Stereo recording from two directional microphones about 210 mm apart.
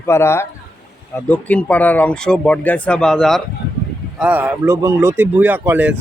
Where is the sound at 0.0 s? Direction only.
10° left (ahead or behind).